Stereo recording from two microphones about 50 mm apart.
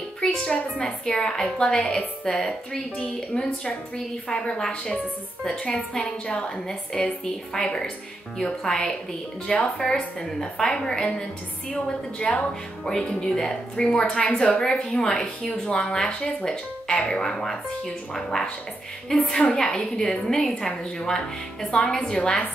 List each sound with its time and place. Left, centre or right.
0.2 s a child's voice: centre
13.2 s a woman's voice: centre
15.4 s a woman's voice: left